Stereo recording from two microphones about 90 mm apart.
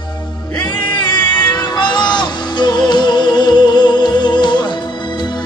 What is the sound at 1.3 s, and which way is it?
Music, 55° left (ahead or behind).